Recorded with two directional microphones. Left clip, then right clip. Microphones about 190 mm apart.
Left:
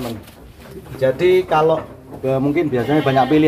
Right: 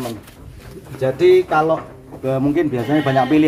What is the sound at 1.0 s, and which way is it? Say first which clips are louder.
Speech: right 1 dB; 10° right (ahead or behind).